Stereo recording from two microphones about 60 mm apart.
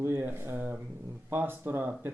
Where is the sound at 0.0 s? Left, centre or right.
Right.